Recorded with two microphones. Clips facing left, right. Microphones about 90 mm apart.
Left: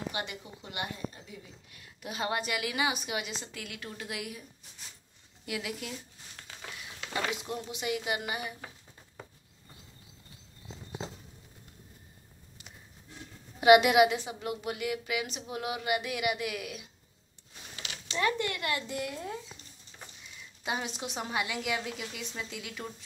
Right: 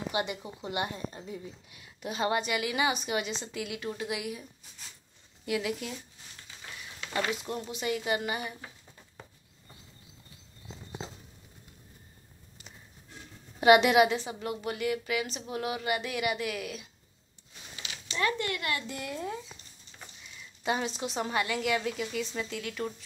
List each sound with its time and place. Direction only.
0.1 s speech: 20° right (ahead or behind)
2.0 s a woman's voice: centre (ahead or behind)
7.2 s a woman's voice: 15° left (ahead or behind)
13.6 s a woman's voice: 5° left (ahead or behind)
18.1 s speech: 20° left (ahead or behind)
18.9 s a woman's voice: 5° left (ahead or behind)
20.6 s a woman's voice: 10° left (ahead or behind)